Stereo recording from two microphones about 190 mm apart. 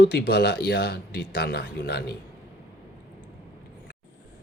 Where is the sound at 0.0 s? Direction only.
60° left (ahead or behind).